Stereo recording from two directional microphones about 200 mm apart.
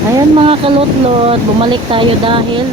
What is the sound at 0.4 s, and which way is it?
Speech, 25° right (ahead or behind).